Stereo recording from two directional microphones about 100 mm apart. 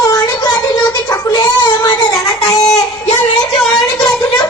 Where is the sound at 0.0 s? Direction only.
40° left (ahead or behind).